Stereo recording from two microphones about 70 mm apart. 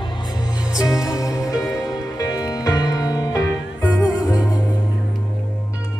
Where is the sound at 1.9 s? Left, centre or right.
Left.